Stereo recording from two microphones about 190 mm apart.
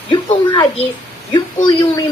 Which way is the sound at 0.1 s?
20° left (ahead or behind).